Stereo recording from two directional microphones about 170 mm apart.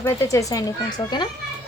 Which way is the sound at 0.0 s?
20° left (ahead or behind).